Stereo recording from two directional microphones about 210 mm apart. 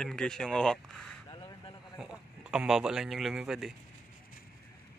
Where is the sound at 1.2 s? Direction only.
20° left (ahead or behind).